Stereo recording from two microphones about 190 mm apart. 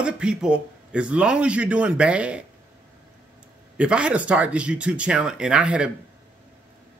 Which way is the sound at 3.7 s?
5° right (ahead or behind).